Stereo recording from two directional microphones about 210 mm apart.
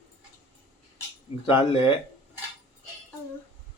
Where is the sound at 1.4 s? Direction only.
25° left (ahead or behind).